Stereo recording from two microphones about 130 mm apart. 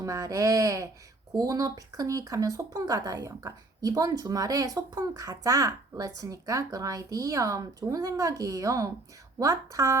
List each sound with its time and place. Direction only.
0.0 s speech: 25° right (ahead or behind)